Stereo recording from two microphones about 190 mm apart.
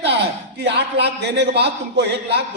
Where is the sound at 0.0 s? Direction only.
65° right (ahead or behind).